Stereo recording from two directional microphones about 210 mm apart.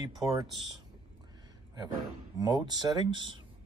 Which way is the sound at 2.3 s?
20° right (ahead or behind).